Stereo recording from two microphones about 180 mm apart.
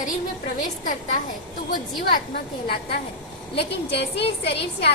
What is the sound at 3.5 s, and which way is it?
Speech, 70° left (ahead or behind).